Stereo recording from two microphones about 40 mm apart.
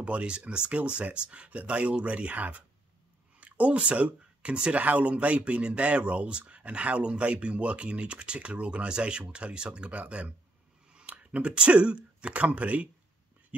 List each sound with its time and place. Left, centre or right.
0.0 s speech: right